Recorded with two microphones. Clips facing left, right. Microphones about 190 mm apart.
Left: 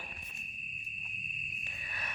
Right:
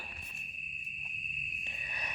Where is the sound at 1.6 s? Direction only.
20° right (ahead or behind).